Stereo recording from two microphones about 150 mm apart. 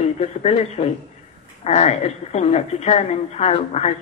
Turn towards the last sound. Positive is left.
turn(degrees=45)  # may be behind; listen again after turning